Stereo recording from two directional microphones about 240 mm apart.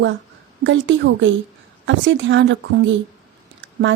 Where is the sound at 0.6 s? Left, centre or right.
Right.